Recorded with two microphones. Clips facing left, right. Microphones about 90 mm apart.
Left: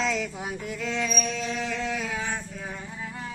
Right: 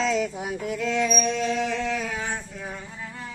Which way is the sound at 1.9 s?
10° left (ahead or behind).